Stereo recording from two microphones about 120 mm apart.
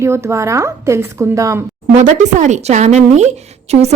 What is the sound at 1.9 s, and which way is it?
A woman's voice, 85° right.